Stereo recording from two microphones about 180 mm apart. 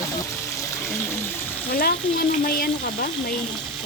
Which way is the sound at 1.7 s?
55° left (ahead or behind).